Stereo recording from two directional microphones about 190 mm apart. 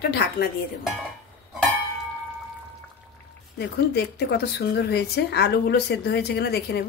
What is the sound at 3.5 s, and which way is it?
Speech, 60° left (ahead or behind).